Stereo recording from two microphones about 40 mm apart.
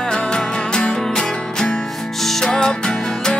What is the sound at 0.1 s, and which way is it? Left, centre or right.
Music, left.